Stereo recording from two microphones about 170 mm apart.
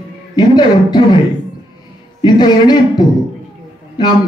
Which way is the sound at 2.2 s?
25° left (ahead or behind).